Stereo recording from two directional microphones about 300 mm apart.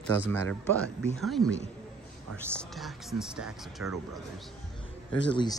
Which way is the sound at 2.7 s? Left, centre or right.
Centre.